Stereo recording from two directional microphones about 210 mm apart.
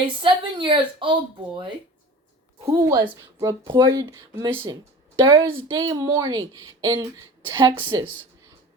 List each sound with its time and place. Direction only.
0.2 s speech: 25° right (ahead or behind)